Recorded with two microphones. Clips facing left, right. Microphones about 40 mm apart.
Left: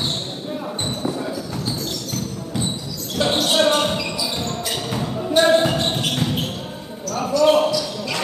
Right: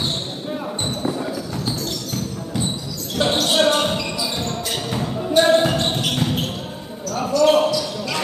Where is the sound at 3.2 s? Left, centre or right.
Centre.